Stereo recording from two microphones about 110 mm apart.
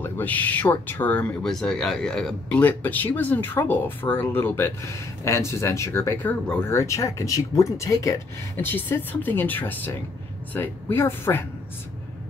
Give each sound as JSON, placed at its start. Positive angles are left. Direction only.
{"t": 0.0, "sound": "speech", "side_deg": 15}